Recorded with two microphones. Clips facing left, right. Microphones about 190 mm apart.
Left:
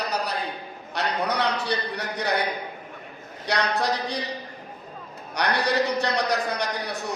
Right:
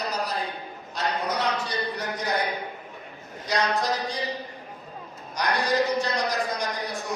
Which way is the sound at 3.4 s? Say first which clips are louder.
Left 1 dB; 65° left (ahead or behind).